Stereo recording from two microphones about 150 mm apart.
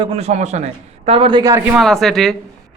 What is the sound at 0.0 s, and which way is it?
A man's voice, 40° right (ahead or behind).